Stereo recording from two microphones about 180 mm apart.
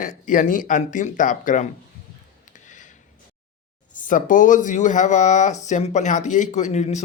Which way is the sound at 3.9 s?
45° left (ahead or behind).